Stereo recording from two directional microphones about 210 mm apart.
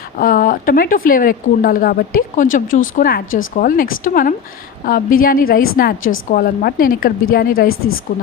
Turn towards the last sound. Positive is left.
turn(degrees=80)